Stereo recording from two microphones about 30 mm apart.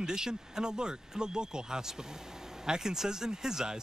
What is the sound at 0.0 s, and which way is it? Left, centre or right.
Speech, right.